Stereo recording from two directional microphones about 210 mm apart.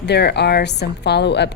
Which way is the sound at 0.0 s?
50° left (ahead or behind).